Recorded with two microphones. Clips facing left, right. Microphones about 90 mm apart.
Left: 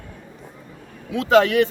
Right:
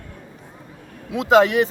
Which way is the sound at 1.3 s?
25° right (ahead or behind).